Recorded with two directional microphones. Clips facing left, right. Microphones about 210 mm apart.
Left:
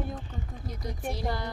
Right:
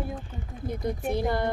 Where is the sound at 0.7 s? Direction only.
55° right (ahead or behind).